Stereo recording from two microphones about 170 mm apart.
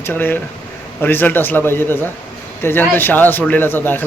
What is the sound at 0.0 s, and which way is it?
A man's voice, 10° left (ahead or behind).